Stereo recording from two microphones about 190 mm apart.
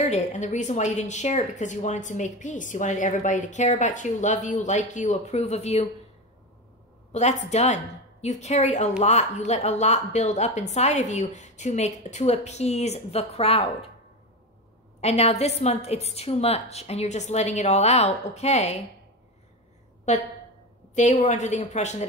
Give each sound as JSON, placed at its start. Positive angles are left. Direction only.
{"t": 0.0, "sound": "speech", "side_deg": 35}
{"t": 7.1, "sound": "speech", "side_deg": 35}
{"t": 15.0, "sound": "speech", "side_deg": 35}
{"t": 20.9, "sound": "speech", "side_deg": 40}